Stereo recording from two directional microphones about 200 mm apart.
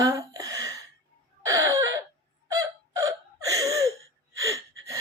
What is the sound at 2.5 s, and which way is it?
Hiccup, 15° right (ahead or behind).